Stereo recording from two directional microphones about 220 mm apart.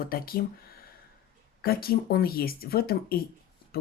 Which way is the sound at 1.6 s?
45° left (ahead or behind).